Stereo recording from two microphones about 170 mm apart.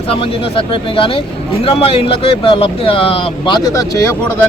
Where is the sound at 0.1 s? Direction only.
35° left (ahead or behind); by 4.4 s 15° left (ahead or behind).